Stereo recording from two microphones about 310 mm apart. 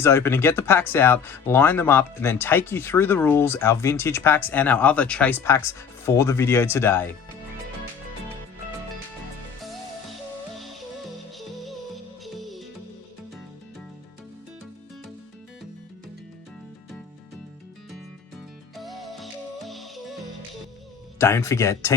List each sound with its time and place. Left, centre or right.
0.0 s speech: centre
12.2 s music: centre
18.8 s music: centre
21.2 s speech: centre